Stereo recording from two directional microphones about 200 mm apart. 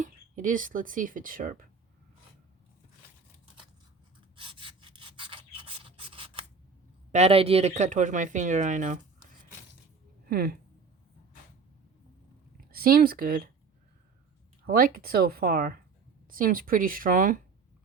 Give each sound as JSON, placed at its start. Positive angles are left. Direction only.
{"t": 0.0, "sound": "speech", "side_deg": -40}
{"t": 4.4, "sound": "rub", "side_deg": -25}
{"t": 7.1, "sound": "speech", "side_deg": -30}
{"t": 10.2, "sound": "speech", "side_deg": -50}
{"t": 12.5, "sound": "speech", "side_deg": -50}
{"t": 14.7, "sound": "speech", "side_deg": -50}